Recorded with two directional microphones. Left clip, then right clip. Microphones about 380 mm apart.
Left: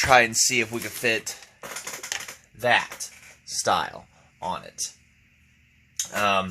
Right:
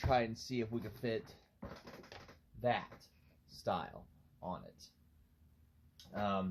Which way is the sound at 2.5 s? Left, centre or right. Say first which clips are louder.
Left 15 dB; left.